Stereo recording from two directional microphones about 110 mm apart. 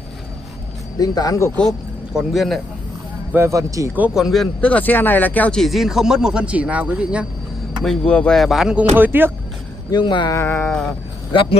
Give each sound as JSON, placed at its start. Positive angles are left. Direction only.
{"t": 0.9, "sound": "speech", "side_deg": 35}
{"t": 1.6, "sound": "a man's voice", "side_deg": 0}
{"t": 3.3, "sound": "speech", "side_deg": -25}
{"t": 4.1, "sound": "speech", "side_deg": 0}
{"t": 4.6, "sound": "speech", "side_deg": 15}
{"t": 5.6, "sound": "speech", "side_deg": 0}
{"t": 7.8, "sound": "speech", "side_deg": 5}
{"t": 8.9, "sound": "speech", "side_deg": -15}
{"t": 9.8, "sound": "speech", "side_deg": 40}
{"t": 10.3, "sound": "music", "side_deg": 20}